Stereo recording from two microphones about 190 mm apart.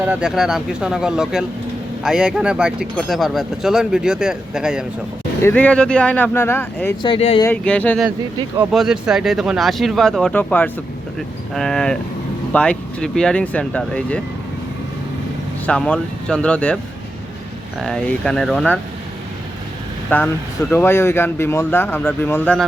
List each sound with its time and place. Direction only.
0.1 s speech: 5° right (ahead or behind)
5.4 s speech: 10° left (ahead or behind)
7.0 s speech: 30° left (ahead or behind)
7.4 s speech: 5° left (ahead or behind)
15.6 s speech: 5° left (ahead or behind)
17.8 s speech: 5° left (ahead or behind)
20.1 s speech: 10° left (ahead or behind)